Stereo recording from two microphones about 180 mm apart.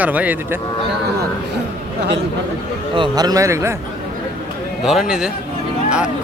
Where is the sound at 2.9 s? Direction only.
25° right (ahead or behind).